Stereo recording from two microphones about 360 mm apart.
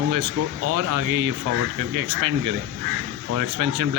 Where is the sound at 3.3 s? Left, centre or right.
Right.